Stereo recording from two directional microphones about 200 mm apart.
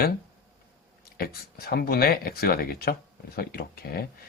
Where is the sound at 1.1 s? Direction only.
50° left (ahead or behind).